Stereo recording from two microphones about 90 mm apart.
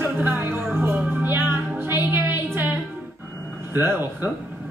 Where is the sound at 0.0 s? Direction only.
25° right (ahead or behind).